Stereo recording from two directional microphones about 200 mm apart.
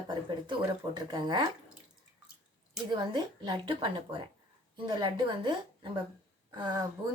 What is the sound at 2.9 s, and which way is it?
Speech, 25° right (ahead or behind).